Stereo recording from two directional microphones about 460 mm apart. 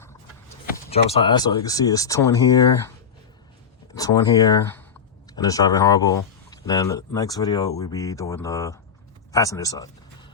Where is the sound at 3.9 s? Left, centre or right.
Centre.